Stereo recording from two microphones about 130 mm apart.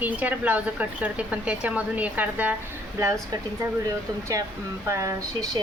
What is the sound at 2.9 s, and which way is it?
Speech, 25° right (ahead or behind).